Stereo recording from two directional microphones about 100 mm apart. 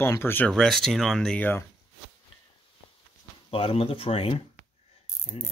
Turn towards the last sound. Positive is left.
turn(degrees=70)  # may be behind; listen again after turning